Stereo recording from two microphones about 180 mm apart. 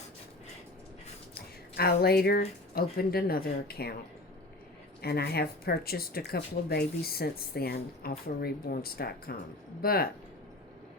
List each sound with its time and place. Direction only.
1.7 s speech: 60° left (ahead or behind)
5.0 s speech: 60° left (ahead or behind)